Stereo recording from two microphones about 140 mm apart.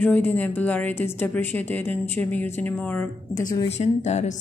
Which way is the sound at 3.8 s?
55° left (ahead or behind).